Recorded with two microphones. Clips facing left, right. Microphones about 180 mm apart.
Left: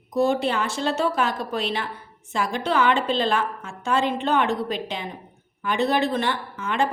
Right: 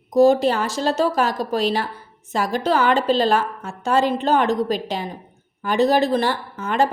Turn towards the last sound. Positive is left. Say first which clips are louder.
# right 4 dB
turn(degrees=-40)  # may be behind; listen again after turning